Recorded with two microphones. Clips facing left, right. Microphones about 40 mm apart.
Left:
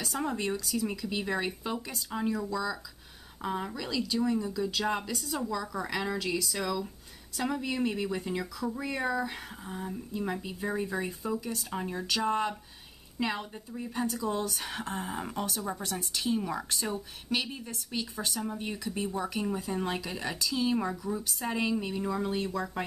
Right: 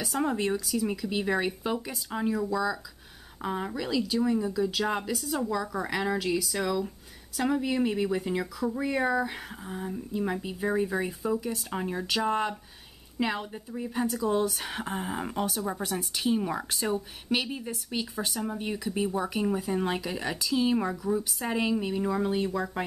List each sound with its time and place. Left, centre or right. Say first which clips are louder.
0.0 s speech: right 4 dB; centre